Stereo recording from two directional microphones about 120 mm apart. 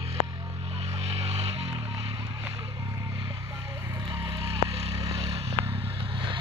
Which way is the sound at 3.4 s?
25° right (ahead or behind).